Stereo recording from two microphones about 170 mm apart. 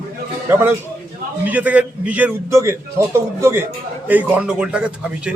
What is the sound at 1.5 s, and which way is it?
A man's voice, 10° right (ahead or behind).